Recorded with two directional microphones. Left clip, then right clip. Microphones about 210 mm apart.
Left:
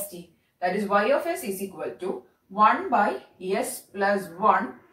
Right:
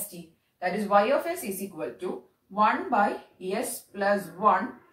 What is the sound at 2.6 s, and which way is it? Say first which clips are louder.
Speech: left 3 dB; 5° left (ahead or behind).